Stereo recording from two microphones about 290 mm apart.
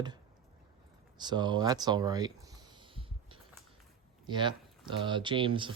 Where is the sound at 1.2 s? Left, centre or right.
Centre.